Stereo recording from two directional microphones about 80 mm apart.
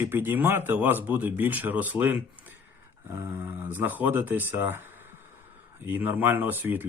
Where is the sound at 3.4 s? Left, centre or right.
Right.